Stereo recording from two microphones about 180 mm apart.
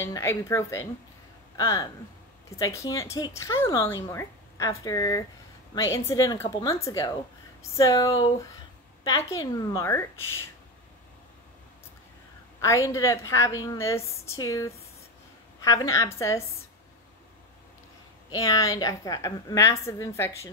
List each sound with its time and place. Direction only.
0.0 s a woman's voice: 15° left (ahead or behind)
12.6 s a woman's voice: 15° left (ahead or behind)
18.3 s a woman's voice: 20° left (ahead or behind)